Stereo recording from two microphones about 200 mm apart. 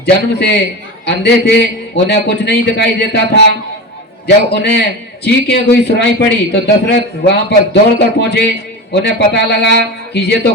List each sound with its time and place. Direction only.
0.0 s a man's voice: 55° left (ahead or behind)